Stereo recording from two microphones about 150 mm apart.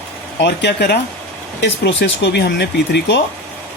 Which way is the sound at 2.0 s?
90° left.